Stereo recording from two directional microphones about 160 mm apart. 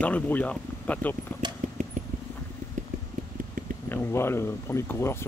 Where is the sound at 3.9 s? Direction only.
15° left (ahead or behind).